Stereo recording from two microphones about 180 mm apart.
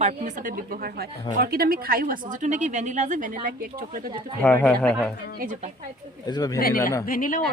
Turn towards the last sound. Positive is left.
turn(degrees=50)  # may be behind; listen again after turning